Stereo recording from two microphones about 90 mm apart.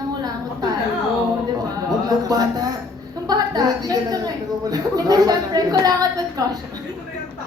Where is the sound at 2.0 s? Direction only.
45° right (ahead or behind).